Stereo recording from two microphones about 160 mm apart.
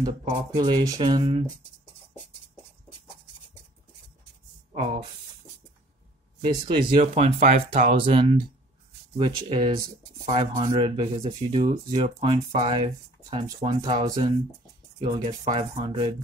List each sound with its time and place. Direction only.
0.0 s speech: 30° right (ahead or behind)
4.7 s speech: 35° right (ahead or behind)
6.4 s speech: 30° right (ahead or behind)
7.5 s speech: 55° right (ahead or behind)
7.9 s speech: 35° right (ahead or behind)